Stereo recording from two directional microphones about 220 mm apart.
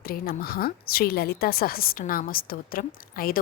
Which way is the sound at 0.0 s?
45° left (ahead or behind).